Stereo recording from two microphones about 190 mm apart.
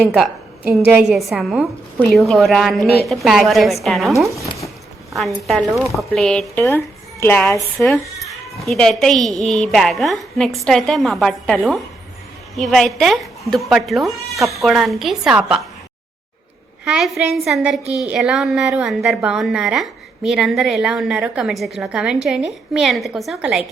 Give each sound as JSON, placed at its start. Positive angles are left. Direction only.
{"t": 0.0, "sound": "a woman's voice", "side_deg": 0}
{"t": 4.4, "sound": "speech", "side_deg": 15}
{"t": 5.1, "sound": "a woman's voice", "side_deg": 0}
{"t": 16.8, "sound": "a woman's voice", "side_deg": -5}